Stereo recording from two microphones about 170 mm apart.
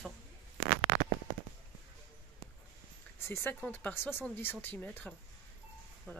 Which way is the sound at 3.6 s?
10° left (ahead or behind).